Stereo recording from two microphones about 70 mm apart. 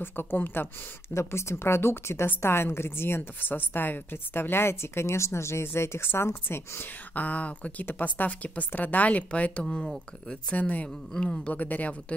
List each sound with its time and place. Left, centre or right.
0.0 s a woman's voice: left
1.1 s a woman's voice: left
7.2 s a woman's voice: centre